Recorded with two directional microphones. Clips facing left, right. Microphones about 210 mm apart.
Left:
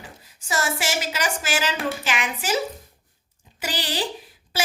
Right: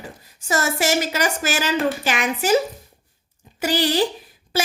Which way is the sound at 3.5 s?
45° right (ahead or behind).